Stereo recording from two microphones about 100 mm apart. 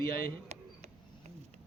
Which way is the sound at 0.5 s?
90° right.